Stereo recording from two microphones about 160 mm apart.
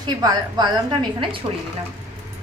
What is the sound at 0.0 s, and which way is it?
Speech, 25° right (ahead or behind).